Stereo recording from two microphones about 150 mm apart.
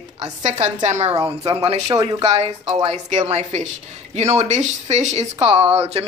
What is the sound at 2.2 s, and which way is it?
A woman's voice, 40° right (ahead or behind).